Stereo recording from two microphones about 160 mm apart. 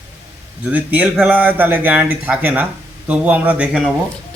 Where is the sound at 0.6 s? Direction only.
10° right (ahead or behind).